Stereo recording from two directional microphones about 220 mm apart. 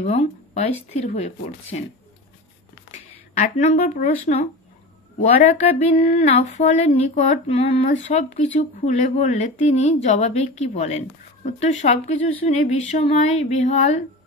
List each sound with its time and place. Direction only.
0.0 s speech: 30° left (ahead or behind)
3.3 s a woman's voice: 35° left (ahead or behind)
5.4 s a woman's voice: 30° left (ahead or behind)